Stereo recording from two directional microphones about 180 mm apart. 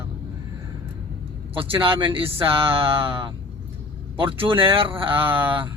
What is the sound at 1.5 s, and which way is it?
Speech, 30° right (ahead or behind).